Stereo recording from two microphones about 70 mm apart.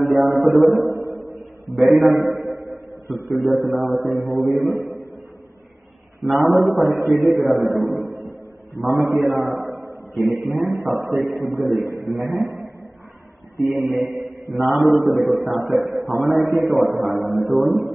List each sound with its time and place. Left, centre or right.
0.0 s a man's voice: centre
2.6 s a sound: right
3.3 s a man's voice: centre
4.8 s a sound: right
6.2 s a man's voice: centre
13.6 s a man's voice: centre